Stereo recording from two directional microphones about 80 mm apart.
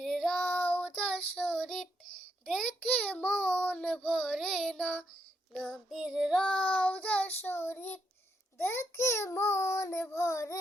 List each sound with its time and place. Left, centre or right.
0.0 s child singing: centre
0.3 s child singing: centre
2.4 s a sound: centre
2.8 s child singing: centre
5.5 s child singing: centre
6.4 s child singing: centre; by 10.6 s left